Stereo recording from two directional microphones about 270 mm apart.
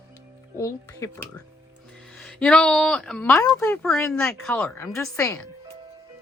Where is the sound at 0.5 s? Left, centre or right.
Centre.